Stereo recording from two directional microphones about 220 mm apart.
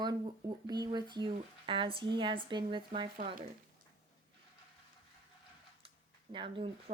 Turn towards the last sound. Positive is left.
turn(degrees=-25)  # may be behind; listen again after turning